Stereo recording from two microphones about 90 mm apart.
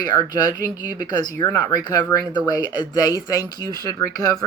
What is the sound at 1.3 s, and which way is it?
Speech, 40° left (ahead or behind).